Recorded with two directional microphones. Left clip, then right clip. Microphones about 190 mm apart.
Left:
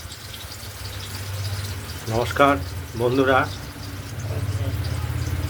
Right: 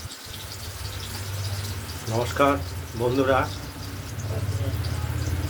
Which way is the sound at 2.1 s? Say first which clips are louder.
Left 4 dB; 15° left (ahead or behind).